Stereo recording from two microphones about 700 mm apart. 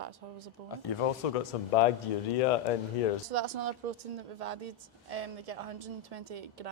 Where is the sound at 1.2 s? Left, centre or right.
Left.